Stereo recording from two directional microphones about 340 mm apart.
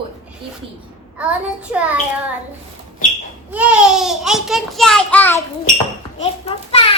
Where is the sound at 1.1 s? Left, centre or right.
Centre.